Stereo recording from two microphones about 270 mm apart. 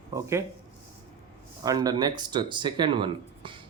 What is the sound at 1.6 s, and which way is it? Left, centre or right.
Speech, centre.